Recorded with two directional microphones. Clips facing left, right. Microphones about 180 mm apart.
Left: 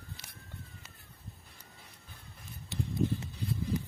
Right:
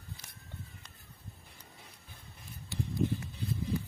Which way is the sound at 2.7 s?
20° left (ahead or behind).